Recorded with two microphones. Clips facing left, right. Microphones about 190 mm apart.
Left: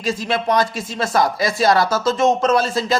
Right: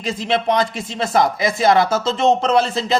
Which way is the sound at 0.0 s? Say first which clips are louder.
Right 1 dB; 25° right (ahead or behind).